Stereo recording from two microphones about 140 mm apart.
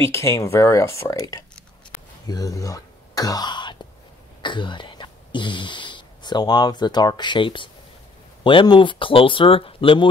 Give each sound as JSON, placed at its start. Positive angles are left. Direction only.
{"t": 0.0, "sound": "speech", "side_deg": 20}